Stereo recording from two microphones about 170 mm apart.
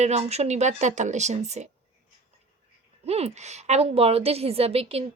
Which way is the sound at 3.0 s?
40° right (ahead or behind).